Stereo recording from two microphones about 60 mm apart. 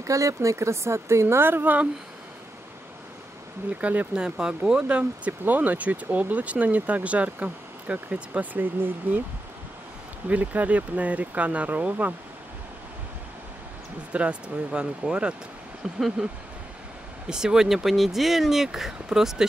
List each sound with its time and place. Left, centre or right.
0.0 s speech: right
3.7 s speech: right
4.1 s speech: centre; by 9.2 s right
10.2 s speech: right
14.1 s speech: centre
17.3 s speech: centre